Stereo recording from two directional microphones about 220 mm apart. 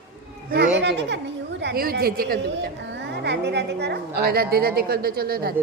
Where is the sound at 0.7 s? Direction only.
50° right (ahead or behind).